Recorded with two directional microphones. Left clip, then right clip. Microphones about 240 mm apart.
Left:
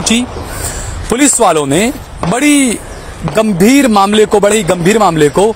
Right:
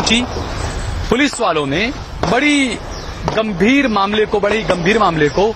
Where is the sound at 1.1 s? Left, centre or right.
Left.